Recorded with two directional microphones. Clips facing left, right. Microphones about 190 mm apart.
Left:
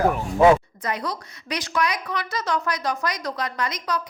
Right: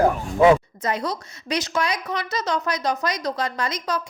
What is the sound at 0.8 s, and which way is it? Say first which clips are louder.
A woman's voice: right 3 dB; 25° right (ahead or behind).